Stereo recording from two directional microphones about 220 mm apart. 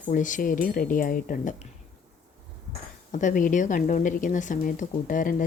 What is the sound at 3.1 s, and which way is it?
Speech, 35° left (ahead or behind).